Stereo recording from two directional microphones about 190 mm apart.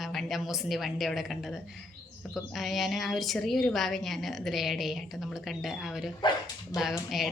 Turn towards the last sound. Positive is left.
turn(degrees=0)  # may be behind; listen again after turning